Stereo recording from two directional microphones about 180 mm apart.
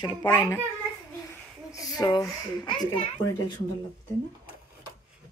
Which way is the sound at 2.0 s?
20° left (ahead or behind).